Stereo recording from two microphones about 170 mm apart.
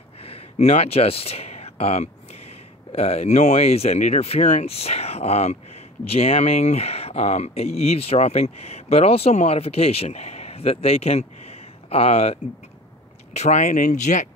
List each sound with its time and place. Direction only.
0.2 s speech: 35° left (ahead or behind)